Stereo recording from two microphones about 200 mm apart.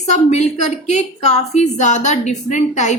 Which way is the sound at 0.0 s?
35° left (ahead or behind).